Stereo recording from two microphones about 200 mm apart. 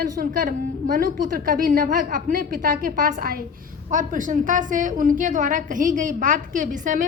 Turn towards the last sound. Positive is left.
turn(degrees=-40)  # may be behind; listen again after turning